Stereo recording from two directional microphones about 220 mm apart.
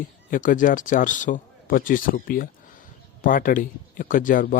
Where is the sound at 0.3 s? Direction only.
35° left (ahead or behind).